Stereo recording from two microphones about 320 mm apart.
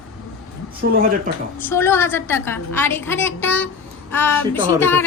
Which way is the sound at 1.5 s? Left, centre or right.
Centre.